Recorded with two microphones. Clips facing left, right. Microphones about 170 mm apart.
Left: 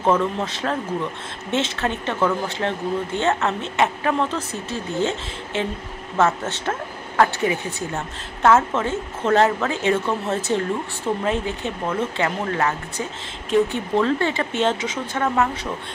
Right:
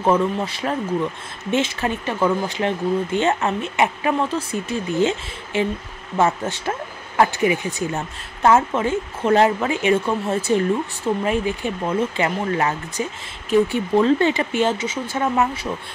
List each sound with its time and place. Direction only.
0.0 s speech: 10° right (ahead or behind)